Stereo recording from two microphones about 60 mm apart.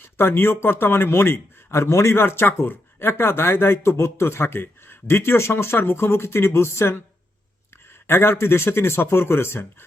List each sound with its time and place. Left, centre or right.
0.0 s a man's voice: left
8.0 s a man's voice: left